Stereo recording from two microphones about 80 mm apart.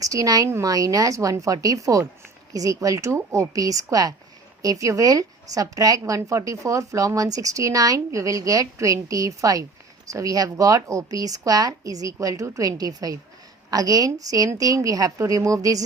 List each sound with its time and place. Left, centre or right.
0.0 s a woman's voice: right